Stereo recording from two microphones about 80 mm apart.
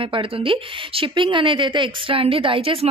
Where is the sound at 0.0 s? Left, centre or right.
Right.